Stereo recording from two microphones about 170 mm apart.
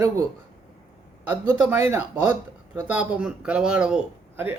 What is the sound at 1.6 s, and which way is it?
A man's voice, 15° right (ahead or behind).